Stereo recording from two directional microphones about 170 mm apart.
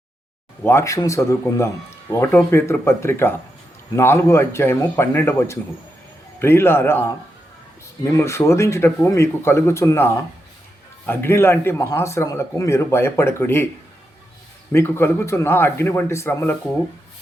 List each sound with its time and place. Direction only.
0.6 s speech: 15° left (ahead or behind)
14.7 s speech: 15° left (ahead or behind)